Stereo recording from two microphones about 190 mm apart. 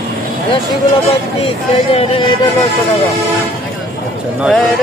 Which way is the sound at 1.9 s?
30° left (ahead or behind).